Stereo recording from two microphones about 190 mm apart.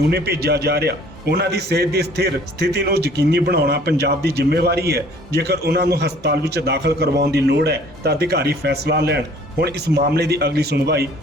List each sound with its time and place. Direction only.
0.1 s a man's voice: 55° right (ahead or behind)